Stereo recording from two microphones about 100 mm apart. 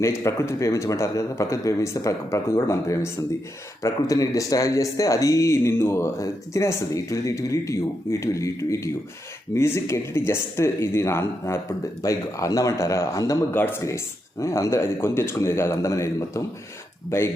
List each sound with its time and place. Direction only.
0.0 s speech: 30° left (ahead or behind)
13.5 s speech: 20° left (ahead or behind)